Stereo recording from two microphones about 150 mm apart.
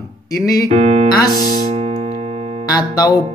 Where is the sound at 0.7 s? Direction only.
40° right (ahead or behind).